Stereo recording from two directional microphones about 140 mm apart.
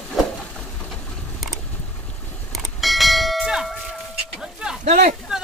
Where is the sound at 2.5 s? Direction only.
Centre (ahead or behind).